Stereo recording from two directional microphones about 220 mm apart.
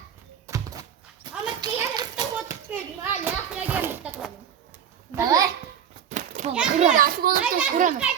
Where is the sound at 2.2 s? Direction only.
10° right (ahead or behind).